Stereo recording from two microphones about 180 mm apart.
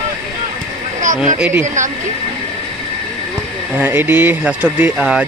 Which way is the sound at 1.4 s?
10° right (ahead or behind).